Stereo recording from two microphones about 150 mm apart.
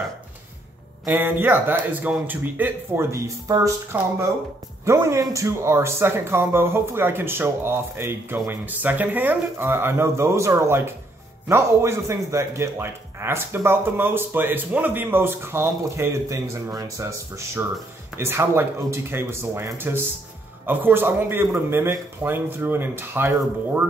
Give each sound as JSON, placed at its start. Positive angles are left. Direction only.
{"t": 1.0, "sound": "speech", "side_deg": -15}